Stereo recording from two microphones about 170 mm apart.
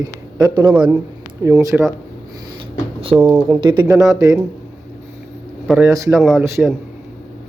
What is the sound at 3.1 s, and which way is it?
Mantra, centre (ahead or behind).